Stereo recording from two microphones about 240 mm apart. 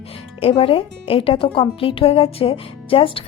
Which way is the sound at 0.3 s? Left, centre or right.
Left.